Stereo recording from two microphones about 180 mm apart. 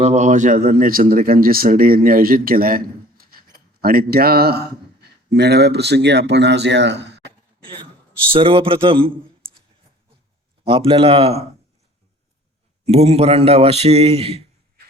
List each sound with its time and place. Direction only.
0.0 s speech: 40° right (ahead or behind); by 7.3 s 75° right (ahead or behind)
8.3 s a man's voice: 30° right (ahead or behind)
10.6 s a man's voice: 30° right (ahead or behind)
12.8 s a man's voice: 35° right (ahead or behind)